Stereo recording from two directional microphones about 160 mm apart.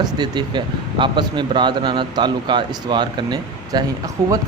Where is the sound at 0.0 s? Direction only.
30° right (ahead or behind).